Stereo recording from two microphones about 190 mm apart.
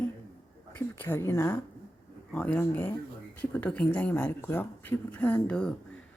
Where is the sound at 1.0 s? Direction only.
10° left (ahead or behind).